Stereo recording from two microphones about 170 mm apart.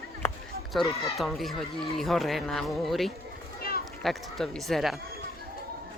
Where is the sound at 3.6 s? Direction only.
60° left (ahead or behind).